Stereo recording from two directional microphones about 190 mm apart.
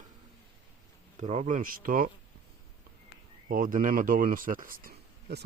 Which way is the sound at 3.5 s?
45° right (ahead or behind).